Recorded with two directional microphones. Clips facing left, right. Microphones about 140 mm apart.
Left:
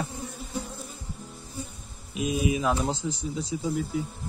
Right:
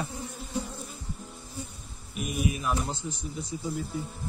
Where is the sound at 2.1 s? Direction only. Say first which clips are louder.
Left 4 dB; 90° left.